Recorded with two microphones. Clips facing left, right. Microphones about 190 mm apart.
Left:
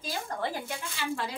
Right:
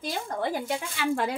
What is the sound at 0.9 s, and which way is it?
Speech, 60° right (ahead or behind).